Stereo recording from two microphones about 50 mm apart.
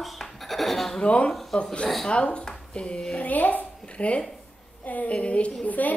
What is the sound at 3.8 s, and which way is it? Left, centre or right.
A woman's voice, left.